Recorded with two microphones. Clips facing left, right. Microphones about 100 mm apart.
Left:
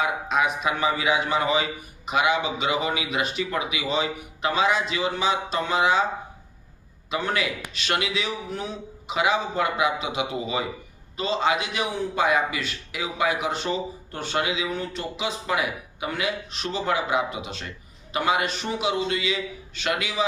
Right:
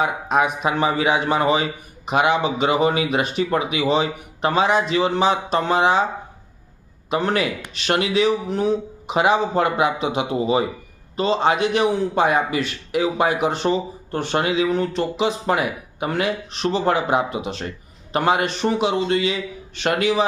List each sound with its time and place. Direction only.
0.0 s a man's voice: 40° right (ahead or behind)
7.3 s a man's voice: 35° right (ahead or behind)
11.3 s a man's voice: 45° right (ahead or behind)